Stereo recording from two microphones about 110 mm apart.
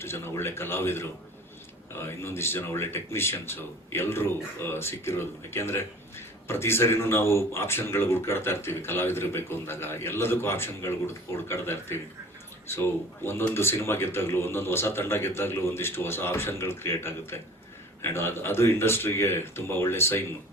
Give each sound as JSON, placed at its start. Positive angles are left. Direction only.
{"t": 0.0, "sound": "speech", "side_deg": 20}